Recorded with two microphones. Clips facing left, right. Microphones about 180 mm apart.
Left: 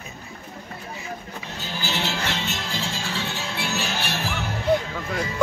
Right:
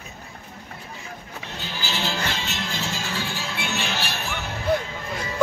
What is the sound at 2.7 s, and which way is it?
Music, 30° left (ahead or behind).